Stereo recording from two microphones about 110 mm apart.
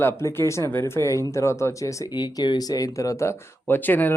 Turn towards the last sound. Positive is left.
turn(degrees=15)  # may be behind; listen again after turning